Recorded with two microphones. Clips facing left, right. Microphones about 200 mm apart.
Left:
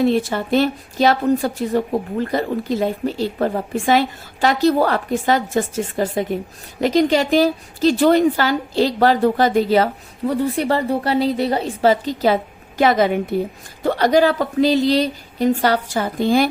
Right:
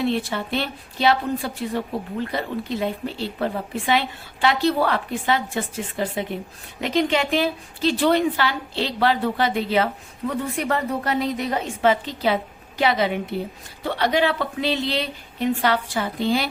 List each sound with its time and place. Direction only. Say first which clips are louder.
0.0 s a woman's voice: left 6 dB; 45° left (ahead or behind)